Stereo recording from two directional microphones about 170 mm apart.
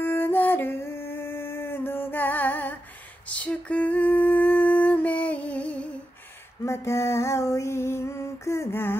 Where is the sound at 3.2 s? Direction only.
10° left (ahead or behind).